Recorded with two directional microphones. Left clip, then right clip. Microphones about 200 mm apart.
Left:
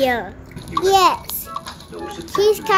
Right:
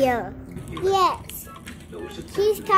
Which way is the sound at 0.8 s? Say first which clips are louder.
Left 6 dB; 20° left (ahead or behind).